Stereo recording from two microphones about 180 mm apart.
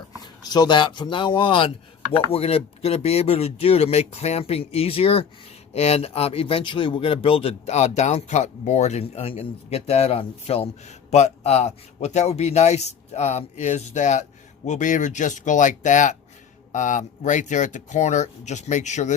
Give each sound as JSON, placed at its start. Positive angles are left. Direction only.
{"t": 0.4, "sound": "speech", "side_deg": 20}